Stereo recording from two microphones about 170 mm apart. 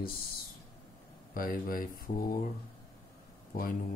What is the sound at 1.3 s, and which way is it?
Speech, 55° left (ahead or behind).